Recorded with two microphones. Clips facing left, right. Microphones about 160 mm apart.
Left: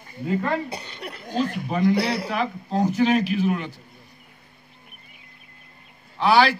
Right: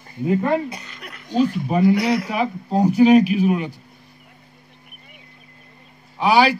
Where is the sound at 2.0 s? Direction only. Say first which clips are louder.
Right 4 dB; 30° left (ahead or behind).